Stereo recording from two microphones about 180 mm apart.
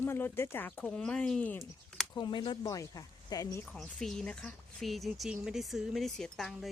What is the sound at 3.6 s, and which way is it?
Speech, 5° left (ahead or behind).